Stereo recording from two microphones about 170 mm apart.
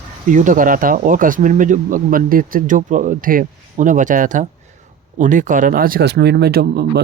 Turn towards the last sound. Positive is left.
turn(degrees=-65)  # may be behind; listen again after turning